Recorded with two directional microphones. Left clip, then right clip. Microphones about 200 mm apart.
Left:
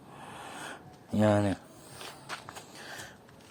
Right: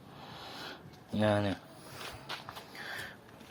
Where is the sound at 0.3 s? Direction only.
15° left (ahead or behind).